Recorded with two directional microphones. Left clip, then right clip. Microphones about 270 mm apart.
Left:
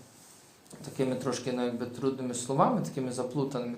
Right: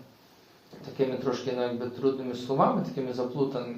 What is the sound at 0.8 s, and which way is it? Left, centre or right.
A man's voice, left.